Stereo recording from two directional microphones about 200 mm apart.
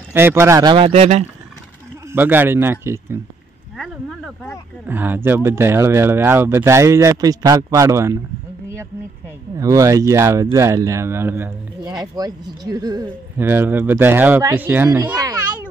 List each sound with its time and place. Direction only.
0.1 s speech: 10° right (ahead or behind); by 1.2 s 35° right (ahead or behind)
2.1 s speech: 10° right (ahead or behind)
3.7 s speech: centre (ahead or behind)
4.8 s speech: 10° right (ahead or behind)
9.6 s speech: 15° right (ahead or behind)